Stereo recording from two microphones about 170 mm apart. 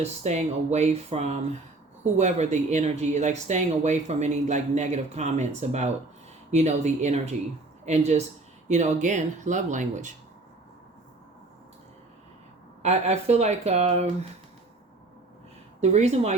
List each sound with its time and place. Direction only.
0.0 s speech: 40° right (ahead or behind)
12.8 s speech: 40° right (ahead or behind)
15.8 s speech: 40° right (ahead or behind)